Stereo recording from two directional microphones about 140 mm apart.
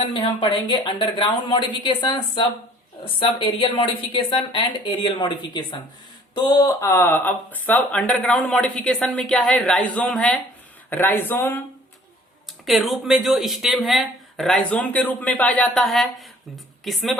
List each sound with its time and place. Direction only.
0.0 s a woman's voice: 40° left (ahead or behind); by 11.6 s 15° left (ahead or behind)
12.6 s speech: centre (ahead or behind)